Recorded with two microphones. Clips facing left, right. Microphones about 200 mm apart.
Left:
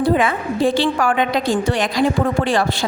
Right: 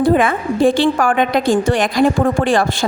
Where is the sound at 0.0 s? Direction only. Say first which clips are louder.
Right 3 dB; 50° right (ahead or behind).